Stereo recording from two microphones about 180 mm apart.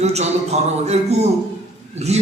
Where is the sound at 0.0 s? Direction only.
35° right (ahead or behind).